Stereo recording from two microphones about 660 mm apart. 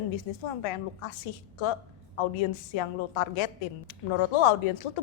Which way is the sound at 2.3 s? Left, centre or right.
Left.